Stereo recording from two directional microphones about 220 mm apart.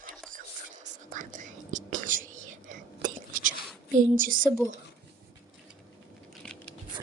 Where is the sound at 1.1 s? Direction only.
35° right (ahead or behind).